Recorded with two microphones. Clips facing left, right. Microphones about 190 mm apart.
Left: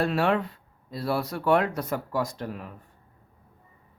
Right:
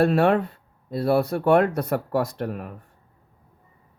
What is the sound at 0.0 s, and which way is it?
Speech, 50° right (ahead or behind).